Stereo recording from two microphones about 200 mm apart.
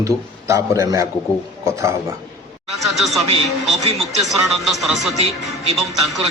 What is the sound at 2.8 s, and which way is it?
Speech, centre (ahead or behind).